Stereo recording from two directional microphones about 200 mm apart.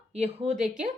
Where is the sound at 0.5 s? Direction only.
5° right (ahead or behind).